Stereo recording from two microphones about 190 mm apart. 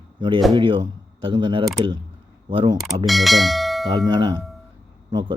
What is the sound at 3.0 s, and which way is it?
Speech, centre (ahead or behind).